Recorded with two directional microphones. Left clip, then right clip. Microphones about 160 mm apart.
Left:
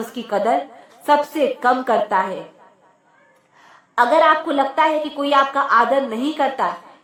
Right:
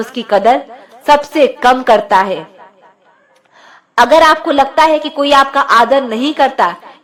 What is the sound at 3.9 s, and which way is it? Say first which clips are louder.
A woman's voice: right 7 dB; 35° right (ahead or behind).